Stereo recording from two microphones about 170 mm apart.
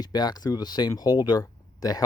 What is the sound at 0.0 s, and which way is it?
Speech, 25° left (ahead or behind).